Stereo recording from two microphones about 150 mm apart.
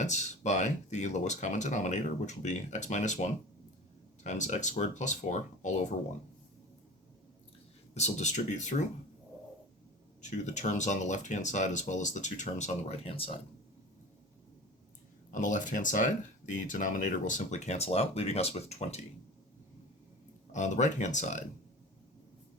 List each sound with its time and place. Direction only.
0.0 s speech: 50° left (ahead or behind)
7.9 s speech: 50° left (ahead or behind)
10.2 s speech: 50° left (ahead or behind)
15.3 s speech: 55° left (ahead or behind)
20.5 s speech: 55° left (ahead or behind)